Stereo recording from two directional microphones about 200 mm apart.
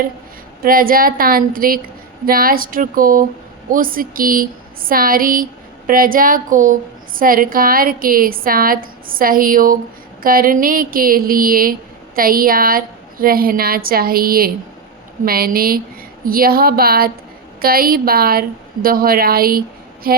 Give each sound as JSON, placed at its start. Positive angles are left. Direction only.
{"t": 0.6, "sound": "a woman's voice", "side_deg": -45}